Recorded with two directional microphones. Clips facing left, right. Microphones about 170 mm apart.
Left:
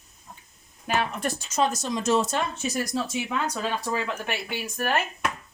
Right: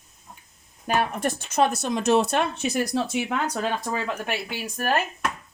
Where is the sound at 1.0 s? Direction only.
55° right (ahead or behind).